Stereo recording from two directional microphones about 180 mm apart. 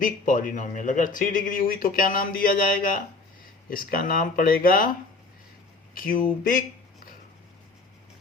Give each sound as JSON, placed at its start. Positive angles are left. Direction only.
{"t": 0.0, "sound": "speech", "side_deg": 45}
{"t": 5.9, "sound": "speech", "side_deg": 50}
{"t": 6.4, "sound": "a sound", "side_deg": 50}